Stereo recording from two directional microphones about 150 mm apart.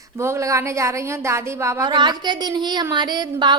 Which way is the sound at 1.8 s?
30° right (ahead or behind).